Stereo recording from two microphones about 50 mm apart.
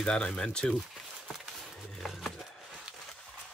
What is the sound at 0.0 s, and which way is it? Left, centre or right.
Speech, centre.